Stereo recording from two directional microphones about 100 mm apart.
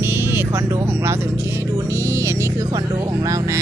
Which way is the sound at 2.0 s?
30° right (ahead or behind).